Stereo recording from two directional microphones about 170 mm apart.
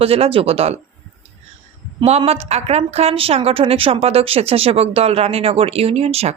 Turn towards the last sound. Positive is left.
turn(degrees=-35)  # may be behind; listen again after turning